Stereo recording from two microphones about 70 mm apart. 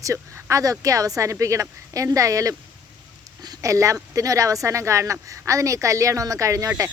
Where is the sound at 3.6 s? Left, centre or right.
Right.